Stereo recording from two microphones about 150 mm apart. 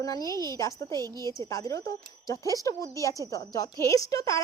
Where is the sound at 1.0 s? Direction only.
25° right (ahead or behind).